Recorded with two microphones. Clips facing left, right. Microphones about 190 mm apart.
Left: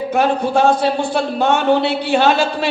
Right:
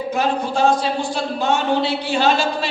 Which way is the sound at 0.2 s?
60° left (ahead or behind).